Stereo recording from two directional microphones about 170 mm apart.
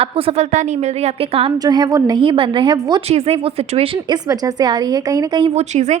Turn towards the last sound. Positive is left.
turn(degrees=-40)  # may be behind; listen again after turning